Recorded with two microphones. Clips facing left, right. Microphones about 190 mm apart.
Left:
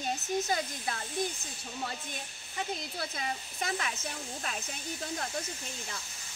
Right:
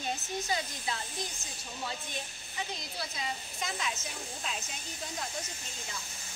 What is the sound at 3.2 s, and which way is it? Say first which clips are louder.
Speech: left 1 dB; 55° left (ahead or behind).